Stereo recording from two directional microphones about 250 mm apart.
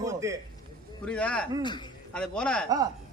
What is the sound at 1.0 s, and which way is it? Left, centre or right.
Speech, centre.